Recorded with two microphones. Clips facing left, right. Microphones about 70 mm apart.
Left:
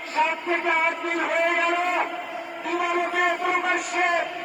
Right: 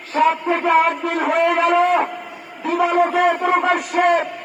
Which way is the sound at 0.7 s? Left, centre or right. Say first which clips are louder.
Right 7 dB; right.